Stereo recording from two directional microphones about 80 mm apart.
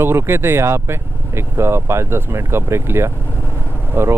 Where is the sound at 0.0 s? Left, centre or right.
Right.